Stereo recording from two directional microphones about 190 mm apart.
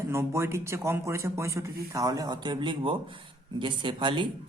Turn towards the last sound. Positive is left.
turn(degrees=-25)  # may be behind; listen again after turning